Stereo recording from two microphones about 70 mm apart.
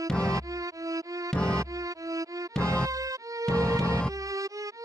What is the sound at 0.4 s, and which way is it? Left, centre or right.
Music, right.